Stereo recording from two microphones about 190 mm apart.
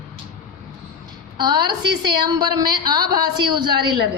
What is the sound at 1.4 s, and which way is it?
A woman's voice, 25° right (ahead or behind).